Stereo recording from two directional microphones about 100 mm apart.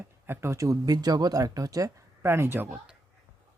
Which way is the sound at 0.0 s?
25° right (ahead or behind).